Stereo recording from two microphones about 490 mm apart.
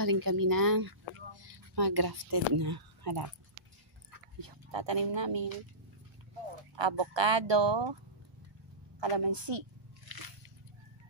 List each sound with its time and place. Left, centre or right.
0.0 s speech: right
4.4 s speech: right
6.7 s speech: right
9.0 s speech: right
10.1 s biting: right